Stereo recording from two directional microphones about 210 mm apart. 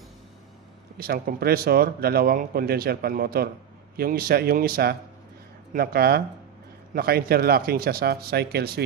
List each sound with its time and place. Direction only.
0.9 s speech: 45° right (ahead or behind)